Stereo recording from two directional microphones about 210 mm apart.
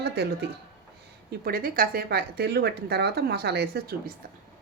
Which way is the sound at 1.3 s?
45° right (ahead or behind).